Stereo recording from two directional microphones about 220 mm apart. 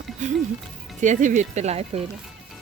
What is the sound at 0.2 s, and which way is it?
Speech, 35° right (ahead or behind).